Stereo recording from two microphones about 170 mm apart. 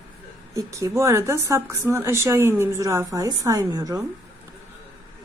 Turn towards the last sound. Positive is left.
turn(degrees=-20)  # may be behind; listen again after turning